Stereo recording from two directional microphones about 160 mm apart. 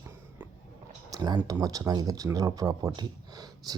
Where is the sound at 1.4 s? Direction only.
15° right (ahead or behind).